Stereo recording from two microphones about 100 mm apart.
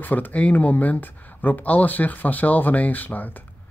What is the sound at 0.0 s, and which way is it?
A man's voice, 20° left (ahead or behind).